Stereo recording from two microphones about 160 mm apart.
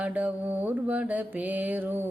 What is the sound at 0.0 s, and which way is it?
Music, 10° right (ahead or behind).